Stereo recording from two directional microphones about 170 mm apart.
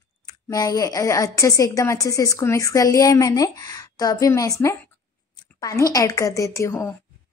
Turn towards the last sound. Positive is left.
turn(degrees=15)  # may be behind; listen again after turning